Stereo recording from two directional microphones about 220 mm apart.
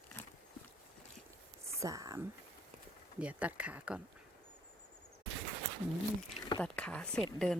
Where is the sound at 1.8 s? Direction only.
15° right (ahead or behind).